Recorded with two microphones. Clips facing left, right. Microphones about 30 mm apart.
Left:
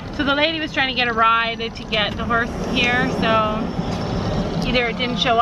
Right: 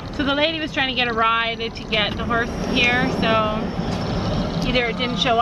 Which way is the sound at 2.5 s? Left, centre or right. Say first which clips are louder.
Even; right.